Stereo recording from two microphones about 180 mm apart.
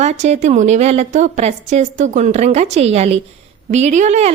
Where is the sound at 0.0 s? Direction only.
40° right (ahead or behind).